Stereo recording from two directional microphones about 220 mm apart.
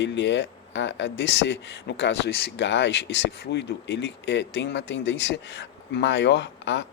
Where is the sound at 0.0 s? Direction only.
55° left (ahead or behind).